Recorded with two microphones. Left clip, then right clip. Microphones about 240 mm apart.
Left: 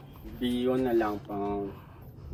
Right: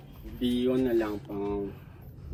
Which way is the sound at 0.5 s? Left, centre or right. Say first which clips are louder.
Even; left.